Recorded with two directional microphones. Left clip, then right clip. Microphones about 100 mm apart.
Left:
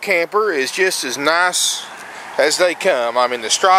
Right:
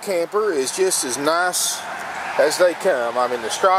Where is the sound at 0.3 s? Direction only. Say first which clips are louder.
Left 3 dB; 50° left (ahead or behind).